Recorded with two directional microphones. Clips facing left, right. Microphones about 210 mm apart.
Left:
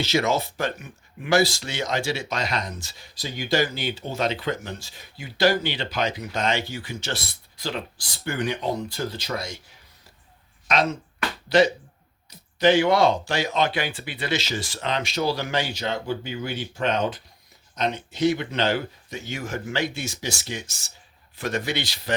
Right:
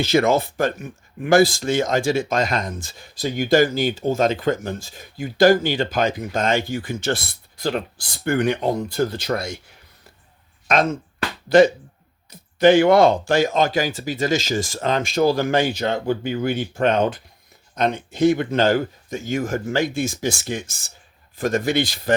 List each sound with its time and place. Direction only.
0.0 s speech: 55° right (ahead or behind)
8.2 s speech: 55° right (ahead or behind)
10.7 s speech: 50° right (ahead or behind)